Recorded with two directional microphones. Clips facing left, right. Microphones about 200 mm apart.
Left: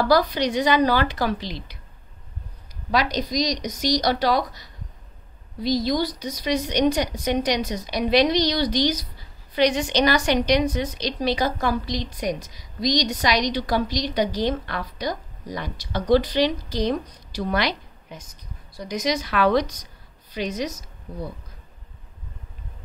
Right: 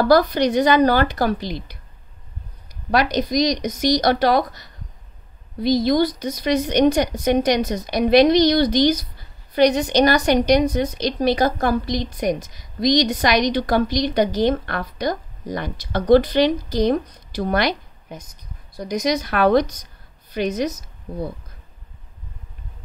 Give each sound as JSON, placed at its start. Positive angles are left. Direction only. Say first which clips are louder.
{"t": 0.0, "sound": "a woman's voice", "louder": "right 4 dB", "side_deg": -50}
{"t": 2.9, "sound": "a woman's voice", "louder": "right 4 dB", "side_deg": -55}